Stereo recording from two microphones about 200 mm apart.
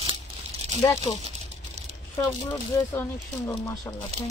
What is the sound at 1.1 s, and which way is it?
Speech, 30° left (ahead or behind).